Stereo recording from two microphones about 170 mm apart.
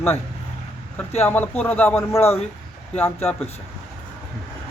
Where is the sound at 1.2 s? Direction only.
10° left (ahead or behind).